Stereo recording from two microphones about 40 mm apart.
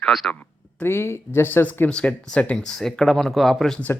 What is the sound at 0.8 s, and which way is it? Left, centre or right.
Speech, left.